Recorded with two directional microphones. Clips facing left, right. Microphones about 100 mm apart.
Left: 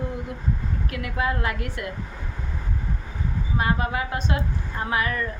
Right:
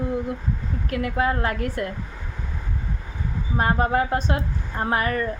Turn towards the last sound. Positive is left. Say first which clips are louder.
# right 3 dB
turn(degrees=-40)  # may be behind; listen again after turning